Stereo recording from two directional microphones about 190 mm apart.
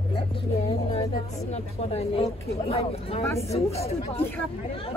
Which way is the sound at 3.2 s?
15° left (ahead or behind).